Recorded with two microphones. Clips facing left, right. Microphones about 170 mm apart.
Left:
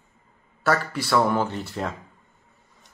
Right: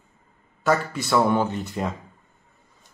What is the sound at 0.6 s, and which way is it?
A man's voice, 20° right (ahead or behind).